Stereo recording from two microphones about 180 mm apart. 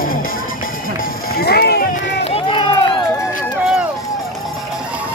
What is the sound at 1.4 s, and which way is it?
Run, 65° left (ahead or behind).